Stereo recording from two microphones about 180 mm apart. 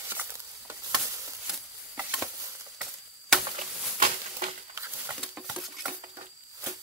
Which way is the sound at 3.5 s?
45° right (ahead or behind).